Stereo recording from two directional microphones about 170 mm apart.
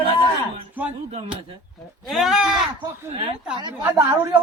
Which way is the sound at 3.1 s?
35° right (ahead or behind).